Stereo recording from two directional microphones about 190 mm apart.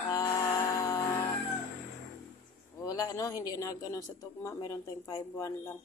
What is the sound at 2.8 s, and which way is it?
A woman's voice, 20° left (ahead or behind).